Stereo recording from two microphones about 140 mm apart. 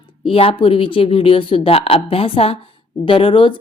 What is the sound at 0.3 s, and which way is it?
A woman's voice, 40° left (ahead or behind).